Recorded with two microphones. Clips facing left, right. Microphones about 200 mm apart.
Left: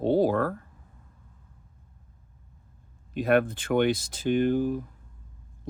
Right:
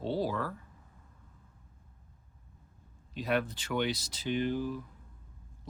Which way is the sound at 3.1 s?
55° left (ahead or behind).